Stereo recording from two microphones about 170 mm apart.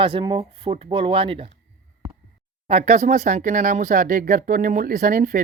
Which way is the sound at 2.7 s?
40° right (ahead or behind).